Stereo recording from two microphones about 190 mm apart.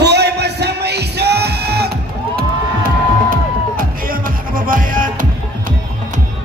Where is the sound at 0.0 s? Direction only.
60° right (ahead or behind).